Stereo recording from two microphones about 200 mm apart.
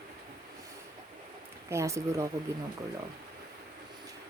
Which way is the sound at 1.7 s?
15° right (ahead or behind).